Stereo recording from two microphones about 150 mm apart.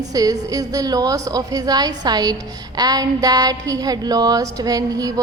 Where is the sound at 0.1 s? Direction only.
25° right (ahead or behind).